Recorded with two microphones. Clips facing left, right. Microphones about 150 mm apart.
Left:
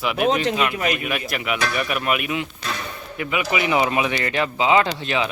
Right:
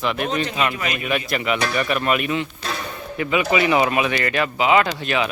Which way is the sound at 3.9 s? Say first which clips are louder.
Right 1 dB; 20° left (ahead or behind).